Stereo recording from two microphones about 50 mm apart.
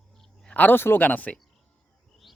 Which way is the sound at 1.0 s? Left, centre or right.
Left.